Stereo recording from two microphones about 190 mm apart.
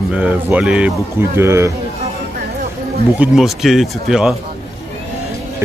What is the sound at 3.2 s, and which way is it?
Speech, centre (ahead or behind).